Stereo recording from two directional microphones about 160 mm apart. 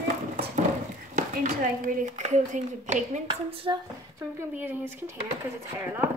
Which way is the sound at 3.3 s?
35° right (ahead or behind).